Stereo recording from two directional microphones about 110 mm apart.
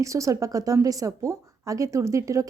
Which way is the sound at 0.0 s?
30° right (ahead or behind).